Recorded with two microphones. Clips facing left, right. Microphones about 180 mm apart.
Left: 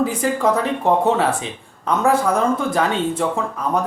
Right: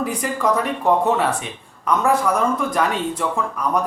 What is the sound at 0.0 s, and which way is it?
Speech, 25° left (ahead or behind).